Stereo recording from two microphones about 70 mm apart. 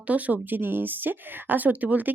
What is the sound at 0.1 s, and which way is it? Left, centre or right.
Speech, right.